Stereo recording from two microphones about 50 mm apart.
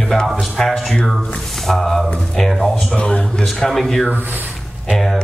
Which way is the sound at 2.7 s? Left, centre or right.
Centre.